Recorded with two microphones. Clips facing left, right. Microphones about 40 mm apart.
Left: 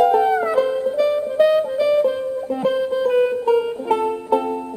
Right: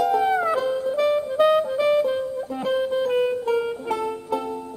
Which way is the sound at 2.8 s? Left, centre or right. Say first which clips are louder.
Left 2 dB; right.